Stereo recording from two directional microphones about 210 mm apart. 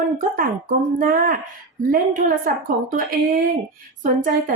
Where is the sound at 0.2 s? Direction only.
40° right (ahead or behind).